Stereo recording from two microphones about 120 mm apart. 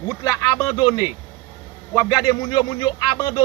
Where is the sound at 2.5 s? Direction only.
35° left (ahead or behind).